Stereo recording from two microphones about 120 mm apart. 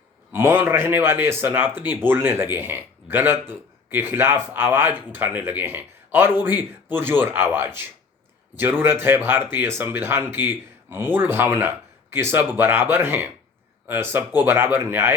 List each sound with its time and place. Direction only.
0.3 s speech: 20° right (ahead or behind)